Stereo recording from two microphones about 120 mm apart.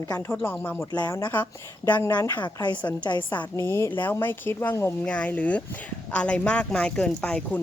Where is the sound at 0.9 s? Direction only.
35° left (ahead or behind).